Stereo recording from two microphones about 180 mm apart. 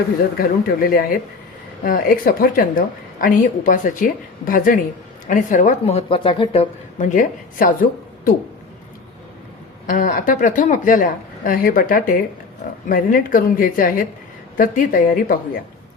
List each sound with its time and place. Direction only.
0.3 s a woman's voice: 55° left (ahead or behind)
5.8 s a woman's voice: 35° left (ahead or behind); by 8.3 s 50° left (ahead or behind)
9.8 s a woman's voice: 50° left (ahead or behind)